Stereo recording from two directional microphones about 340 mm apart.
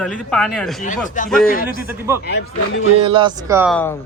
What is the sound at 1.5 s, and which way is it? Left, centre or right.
Speech, left.